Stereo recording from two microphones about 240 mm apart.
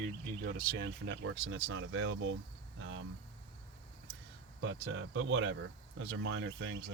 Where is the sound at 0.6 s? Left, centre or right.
Right.